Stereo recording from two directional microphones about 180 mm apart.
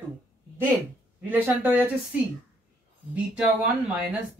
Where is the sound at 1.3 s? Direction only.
10° right (ahead or behind).